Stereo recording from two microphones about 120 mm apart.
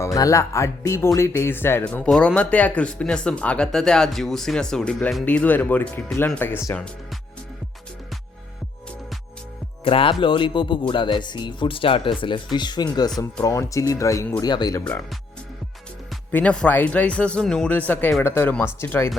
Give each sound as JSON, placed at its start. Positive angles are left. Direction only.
{"t": 0.0, "sound": "speech", "side_deg": 30}
{"t": 9.8, "sound": "speech", "side_deg": 50}
{"t": 13.4, "sound": "speech", "side_deg": 25}
{"t": 16.3, "sound": "speech", "side_deg": 10}